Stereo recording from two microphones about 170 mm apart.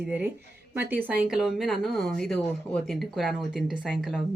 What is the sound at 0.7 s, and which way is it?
A woman's voice, 10° right (ahead or behind).